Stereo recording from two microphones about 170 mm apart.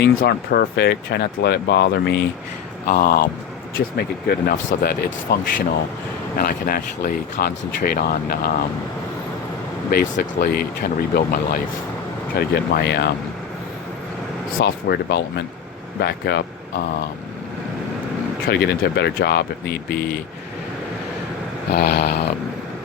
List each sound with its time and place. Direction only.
0.0 s speech: 75° left (ahead or behind)
2.8 s speech: 60° left (ahead or behind)
9.9 s speech: 65° left (ahead or behind)
14.6 s speech: 85° left
18.4 s speech: 75° left (ahead or behind)
21.7 s speech: 70° left (ahead or behind)